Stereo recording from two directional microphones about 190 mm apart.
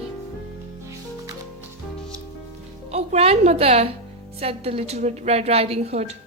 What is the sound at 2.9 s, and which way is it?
A woman's voice, 35° right (ahead or behind).